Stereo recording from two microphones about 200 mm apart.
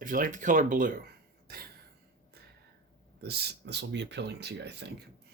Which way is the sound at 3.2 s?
55° right (ahead or behind).